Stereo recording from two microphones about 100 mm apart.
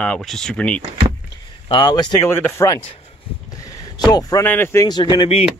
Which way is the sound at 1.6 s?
45° left (ahead or behind).